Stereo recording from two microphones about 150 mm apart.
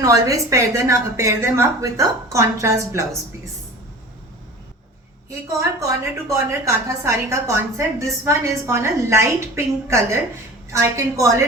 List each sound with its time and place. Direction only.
0.0 s a woman's voice: 20° right (ahead or behind)
5.5 s a woman's voice: 20° right (ahead or behind)